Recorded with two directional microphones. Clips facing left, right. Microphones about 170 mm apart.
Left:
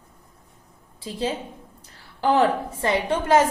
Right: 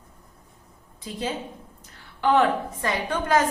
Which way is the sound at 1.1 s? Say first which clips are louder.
Left 3 dB; 30° left (ahead or behind).